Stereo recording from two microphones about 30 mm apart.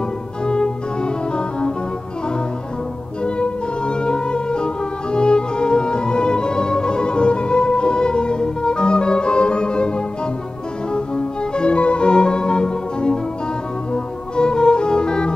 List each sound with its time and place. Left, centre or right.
0.5 s music: left
3.3 s music: left